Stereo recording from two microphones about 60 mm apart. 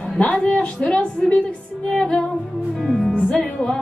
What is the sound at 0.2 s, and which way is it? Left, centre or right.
A woman's voice, left.